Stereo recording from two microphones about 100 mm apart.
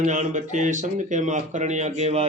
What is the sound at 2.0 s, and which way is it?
Speech, 90° right.